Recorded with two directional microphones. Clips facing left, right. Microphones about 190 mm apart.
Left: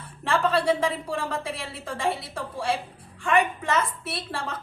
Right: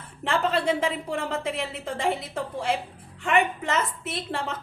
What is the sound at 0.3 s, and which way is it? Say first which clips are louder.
A woman's voice: left 1 dB; 20° right (ahead or behind).